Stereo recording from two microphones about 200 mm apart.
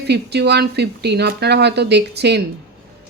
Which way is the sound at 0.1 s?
55° right (ahead or behind).